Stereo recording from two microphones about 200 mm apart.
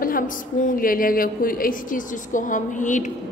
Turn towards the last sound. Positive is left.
turn(degrees=40)  # may be behind; listen again after turning